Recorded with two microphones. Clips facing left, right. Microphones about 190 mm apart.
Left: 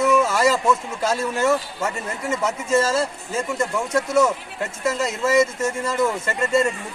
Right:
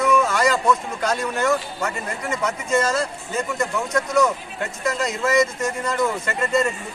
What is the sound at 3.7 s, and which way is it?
Speech, 10° left (ahead or behind).